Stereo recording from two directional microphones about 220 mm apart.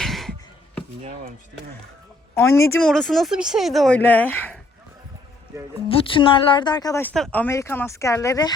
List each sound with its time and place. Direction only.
0.0 s a sound: centre (ahead or behind)
2.3 s speech: 10° left (ahead or behind)
5.9 s a woman's voice: 25° left (ahead or behind)
7.1 s speech: 5° left (ahead or behind)